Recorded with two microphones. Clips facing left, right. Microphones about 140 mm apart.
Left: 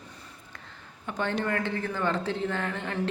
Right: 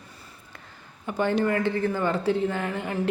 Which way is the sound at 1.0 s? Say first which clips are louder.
Right 6 dB; 10° right (ahead or behind).